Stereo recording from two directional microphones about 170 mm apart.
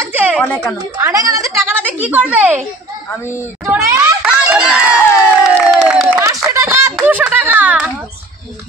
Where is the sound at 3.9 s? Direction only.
10° right (ahead or behind).